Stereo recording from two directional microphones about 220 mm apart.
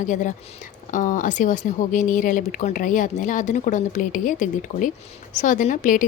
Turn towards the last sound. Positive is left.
turn(degrees=35)  # may be behind; listen again after turning